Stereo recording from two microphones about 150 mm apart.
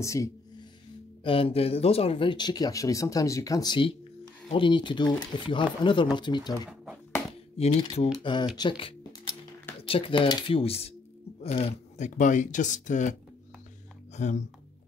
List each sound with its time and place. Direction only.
0.0 s speech: 20° left (ahead or behind)
1.2 s speech: 40° left (ahead or behind)
8.1 s speech: 30° left (ahead or behind)
8.5 s a sound: 35° left (ahead or behind)
9.8 s speech: 35° left (ahead or behind); by 14.4 s 50° left (ahead or behind)